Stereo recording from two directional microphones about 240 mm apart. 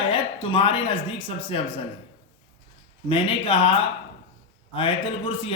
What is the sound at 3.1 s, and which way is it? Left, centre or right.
Speech, left.